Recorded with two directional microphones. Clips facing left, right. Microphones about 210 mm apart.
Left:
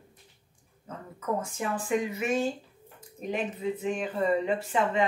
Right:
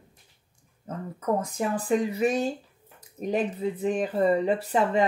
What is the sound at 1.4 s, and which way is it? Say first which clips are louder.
Speech: right 4 dB; 35° right (ahead or behind).